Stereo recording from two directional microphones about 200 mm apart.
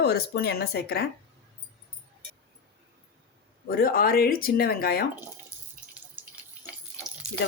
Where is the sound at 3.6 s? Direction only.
45° left (ahead or behind).